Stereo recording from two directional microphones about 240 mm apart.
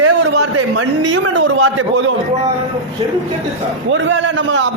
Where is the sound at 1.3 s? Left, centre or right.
Right.